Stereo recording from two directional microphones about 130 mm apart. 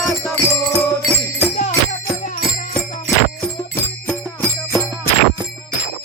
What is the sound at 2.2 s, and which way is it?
Music, 85° left.